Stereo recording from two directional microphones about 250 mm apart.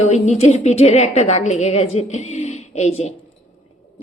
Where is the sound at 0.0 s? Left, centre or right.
Left.